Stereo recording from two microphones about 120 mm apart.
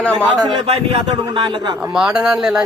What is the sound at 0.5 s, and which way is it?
Speech, 55° right (ahead or behind).